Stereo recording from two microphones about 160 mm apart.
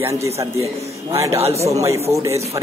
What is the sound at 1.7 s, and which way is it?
Speech, 20° right (ahead or behind).